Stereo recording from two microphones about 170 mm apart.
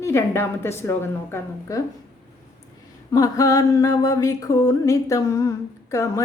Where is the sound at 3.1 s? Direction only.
20° left (ahead or behind).